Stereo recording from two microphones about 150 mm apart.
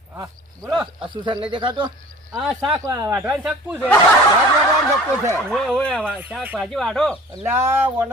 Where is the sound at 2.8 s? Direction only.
20° right (ahead or behind).